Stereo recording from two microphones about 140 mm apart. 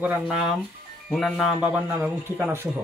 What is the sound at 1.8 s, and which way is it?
Speech, 20° right (ahead or behind).